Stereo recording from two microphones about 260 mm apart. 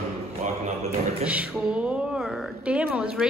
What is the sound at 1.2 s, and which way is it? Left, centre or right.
Speech, centre.